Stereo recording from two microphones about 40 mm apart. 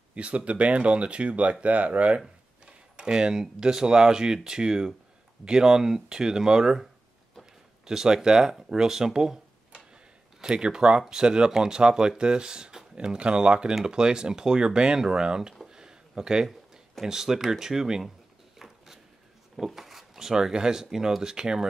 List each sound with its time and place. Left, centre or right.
0.1 s speech: right
2.6 s speech: right
15.7 s a sound: centre
17.0 s speech: centre
18.6 s a sound: centre
19.6 s speech: centre